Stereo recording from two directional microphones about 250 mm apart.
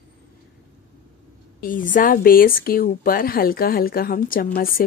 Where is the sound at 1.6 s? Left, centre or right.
Left.